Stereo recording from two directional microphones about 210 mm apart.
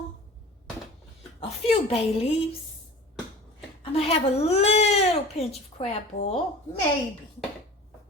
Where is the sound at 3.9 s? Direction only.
30° left (ahead or behind).